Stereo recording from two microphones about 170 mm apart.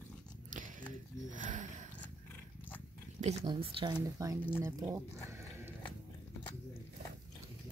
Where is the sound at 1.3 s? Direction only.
50° right (ahead or behind).